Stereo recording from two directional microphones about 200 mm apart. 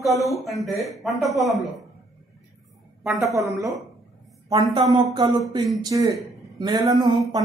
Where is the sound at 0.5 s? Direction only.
Centre (ahead or behind).